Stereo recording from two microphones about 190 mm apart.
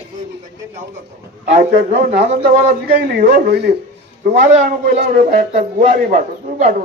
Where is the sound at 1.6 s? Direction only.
45° right (ahead or behind).